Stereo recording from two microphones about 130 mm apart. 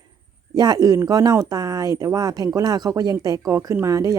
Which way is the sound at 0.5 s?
30° right (ahead or behind).